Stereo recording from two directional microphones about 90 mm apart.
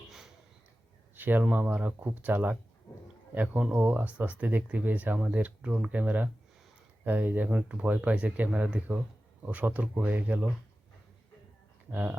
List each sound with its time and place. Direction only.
1.1 s speech: 20° right (ahead or behind)
11.9 s speech: 20° right (ahead or behind)